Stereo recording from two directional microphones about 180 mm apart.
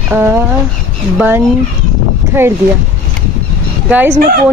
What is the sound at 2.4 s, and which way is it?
Speech, 15° right (ahead or behind).